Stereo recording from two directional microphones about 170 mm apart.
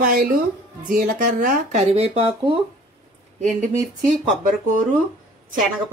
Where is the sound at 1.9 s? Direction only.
35° right (ahead or behind).